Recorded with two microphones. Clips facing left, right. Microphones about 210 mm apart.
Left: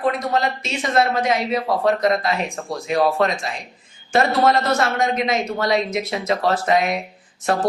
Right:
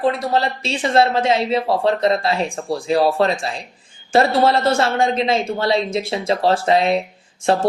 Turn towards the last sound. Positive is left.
turn(degrees=-30)  # may be behind; listen again after turning